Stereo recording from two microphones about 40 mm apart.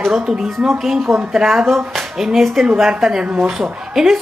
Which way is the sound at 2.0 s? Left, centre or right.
Centre.